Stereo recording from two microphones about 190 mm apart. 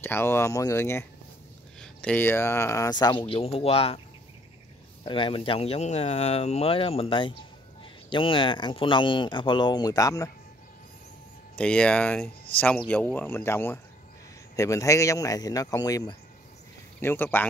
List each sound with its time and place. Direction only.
0.0 s speech: 10° left (ahead or behind); by 4.0 s 30° left (ahead or behind)
5.0 s speech: 25° left (ahead or behind)
11.5 s speech: 5° left (ahead or behind)